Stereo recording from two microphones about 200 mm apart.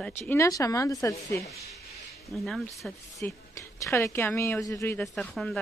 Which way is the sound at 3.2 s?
15° left (ahead or behind).